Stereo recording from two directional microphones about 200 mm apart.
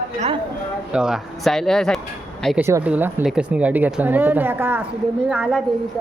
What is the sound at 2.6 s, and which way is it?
Speech, 10° right (ahead or behind).